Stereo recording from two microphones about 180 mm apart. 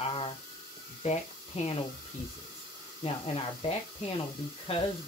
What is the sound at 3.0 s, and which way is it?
Speech, 35° left (ahead or behind).